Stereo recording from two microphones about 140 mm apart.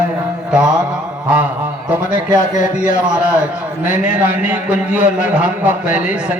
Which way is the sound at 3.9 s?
10° right (ahead or behind).